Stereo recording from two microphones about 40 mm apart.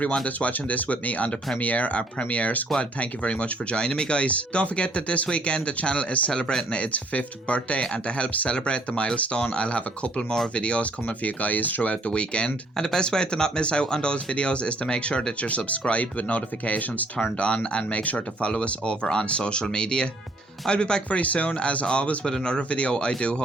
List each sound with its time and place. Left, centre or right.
0.3 s speech: left
11.8 s speech: left
12.7 s speech: centre
15.4 s speech: left
17.3 s speech: left
21.2 s speech: left
22.2 s speech: centre
22.5 s speech: left